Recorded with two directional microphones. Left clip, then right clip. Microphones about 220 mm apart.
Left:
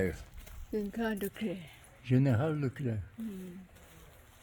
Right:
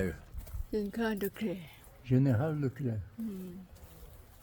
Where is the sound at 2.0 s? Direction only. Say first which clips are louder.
Even; 45° left (ahead or behind).